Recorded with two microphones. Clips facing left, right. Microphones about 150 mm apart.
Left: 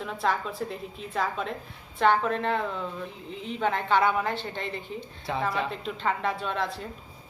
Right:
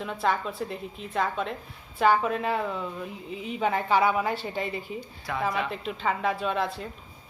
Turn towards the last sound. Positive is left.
turn(degrees=0)  # may be behind; listen again after turning